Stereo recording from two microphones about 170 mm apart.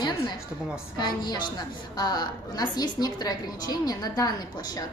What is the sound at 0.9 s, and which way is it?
A woman's voice, 25° left (ahead or behind).